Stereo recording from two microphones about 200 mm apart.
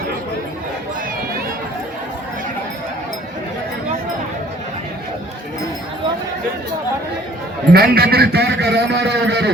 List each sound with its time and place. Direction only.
7.7 s a man's voice: 50° right (ahead or behind)